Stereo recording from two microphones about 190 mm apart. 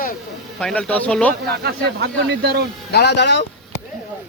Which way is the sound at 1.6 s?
60° right (ahead or behind).